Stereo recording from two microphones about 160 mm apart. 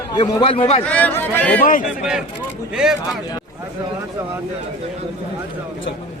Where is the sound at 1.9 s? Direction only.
5° right (ahead or behind).